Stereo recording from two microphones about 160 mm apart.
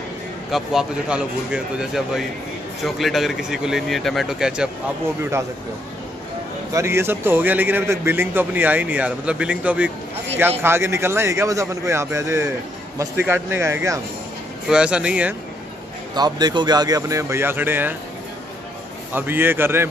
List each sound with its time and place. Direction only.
0.5 s a man's voice: centre (ahead or behind)
6.7 s a man's voice: 15° right (ahead or behind)
14.7 s a man's voice: 5° right (ahead or behind)
16.2 s speech: 25° right (ahead or behind)
19.1 s a man's voice: 15° right (ahead or behind)